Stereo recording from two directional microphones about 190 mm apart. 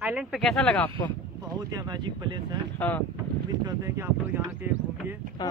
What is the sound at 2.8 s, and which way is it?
Speech, 10° left (ahead or behind).